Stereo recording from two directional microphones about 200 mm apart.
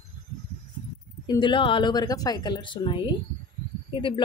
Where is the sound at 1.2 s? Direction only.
25° left (ahead or behind).